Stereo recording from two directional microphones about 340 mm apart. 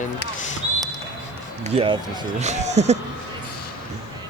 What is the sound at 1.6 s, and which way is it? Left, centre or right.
Speech, centre.